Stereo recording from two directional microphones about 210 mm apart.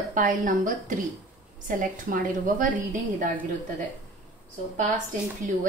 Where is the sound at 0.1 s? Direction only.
40° right (ahead or behind).